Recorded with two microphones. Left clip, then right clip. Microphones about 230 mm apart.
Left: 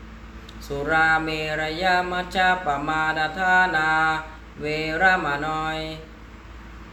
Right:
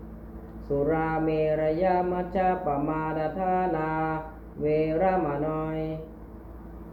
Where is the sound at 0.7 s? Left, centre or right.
Left.